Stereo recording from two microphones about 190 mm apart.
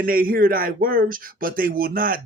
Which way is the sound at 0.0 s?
50° right (ahead or behind).